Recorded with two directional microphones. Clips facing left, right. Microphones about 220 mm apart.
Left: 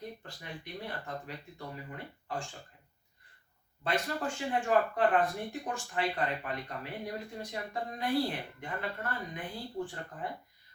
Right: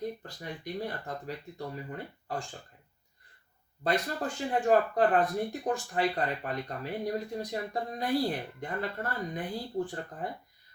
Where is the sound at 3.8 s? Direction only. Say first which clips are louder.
Right 3 dB; 40° right (ahead or behind).